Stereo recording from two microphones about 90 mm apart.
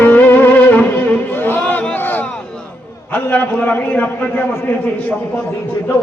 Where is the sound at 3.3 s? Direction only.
20° left (ahead or behind).